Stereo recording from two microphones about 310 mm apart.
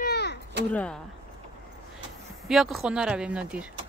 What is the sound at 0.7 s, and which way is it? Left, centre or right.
Speech, centre.